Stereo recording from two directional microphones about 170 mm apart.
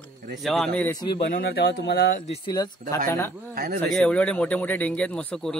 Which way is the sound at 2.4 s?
25° left (ahead or behind).